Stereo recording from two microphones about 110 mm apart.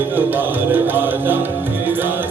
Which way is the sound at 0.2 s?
20° right (ahead or behind).